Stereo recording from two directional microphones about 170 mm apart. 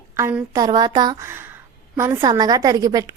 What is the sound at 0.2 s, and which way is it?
A woman's voice, 15° right (ahead or behind).